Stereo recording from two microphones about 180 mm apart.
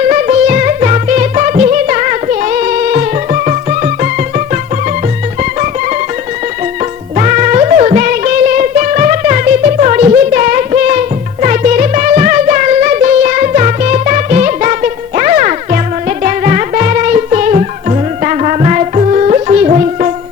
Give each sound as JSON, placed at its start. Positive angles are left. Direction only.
{"t": 0.1, "sound": "music", "side_deg": -40}
{"t": 7.2, "sound": "music", "side_deg": -40}